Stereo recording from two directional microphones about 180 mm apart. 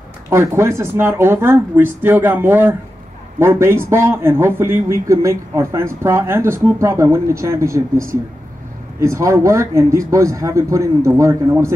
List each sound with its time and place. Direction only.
0.3 s a man's voice: 15° right (ahead or behind)